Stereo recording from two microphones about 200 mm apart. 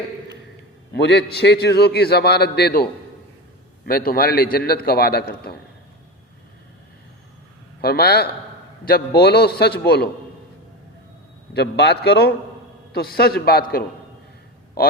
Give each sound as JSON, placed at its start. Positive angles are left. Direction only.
{"t": 0.9, "sound": "a man's voice", "side_deg": 60}
{"t": 3.8, "sound": "a man's voice", "side_deg": 45}
{"t": 7.8, "sound": "a man's voice", "side_deg": 50}
{"t": 11.5, "sound": "a man's voice", "side_deg": 55}